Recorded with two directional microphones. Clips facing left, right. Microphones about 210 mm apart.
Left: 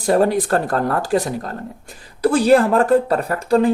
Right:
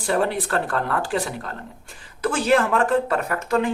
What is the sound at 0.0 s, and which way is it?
Speech, 40° left (ahead or behind).